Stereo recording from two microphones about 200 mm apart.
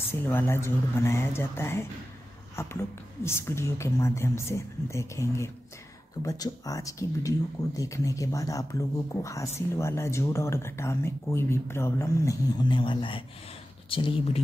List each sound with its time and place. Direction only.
0.1 s speech: 10° left (ahead or behind); by 14.4 s 25° left (ahead or behind)